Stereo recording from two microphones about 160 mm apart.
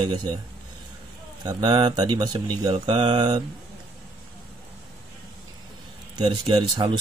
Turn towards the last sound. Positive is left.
turn(degrees=-30)  # may be behind; listen again after turning